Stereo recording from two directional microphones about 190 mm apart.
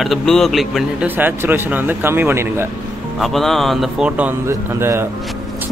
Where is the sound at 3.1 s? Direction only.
Centre (ahead or behind).